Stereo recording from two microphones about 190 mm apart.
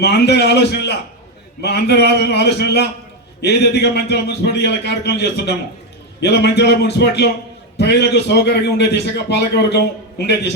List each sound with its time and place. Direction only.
0.0 s a man's voice: 60° left (ahead or behind)